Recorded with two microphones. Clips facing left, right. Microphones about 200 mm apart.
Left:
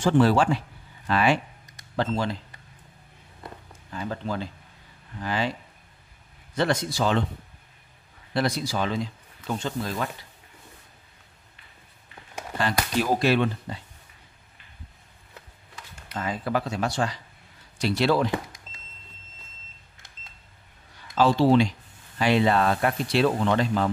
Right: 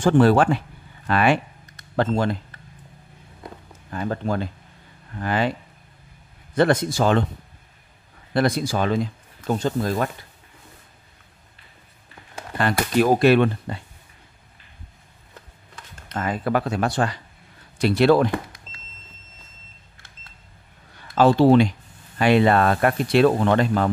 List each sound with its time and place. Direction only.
0.0 s speech: 55° right (ahead or behind)
3.9 s speech: 55° right (ahead or behind)
6.5 s speech: 50° right (ahead or behind)
8.3 s speech: 55° right (ahead or behind)
12.5 s speech: 55° right (ahead or behind)
16.2 s speech: 60° right (ahead or behind)
21.1 s speech: 55° right (ahead or behind)